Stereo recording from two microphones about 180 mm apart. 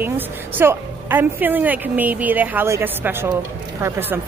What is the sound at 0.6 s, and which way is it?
A woman's voice, 10° right (ahead or behind).